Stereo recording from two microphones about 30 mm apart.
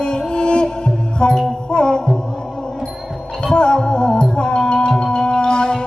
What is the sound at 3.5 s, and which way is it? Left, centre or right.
Music, left.